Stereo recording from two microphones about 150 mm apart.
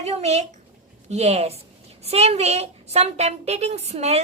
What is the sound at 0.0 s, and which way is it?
A woman's voice, 45° right (ahead or behind).